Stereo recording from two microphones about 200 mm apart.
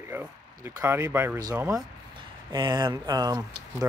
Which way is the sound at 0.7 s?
10° right (ahead or behind).